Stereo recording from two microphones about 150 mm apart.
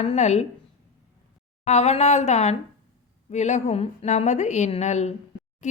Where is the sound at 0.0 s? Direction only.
45° left (ahead or behind).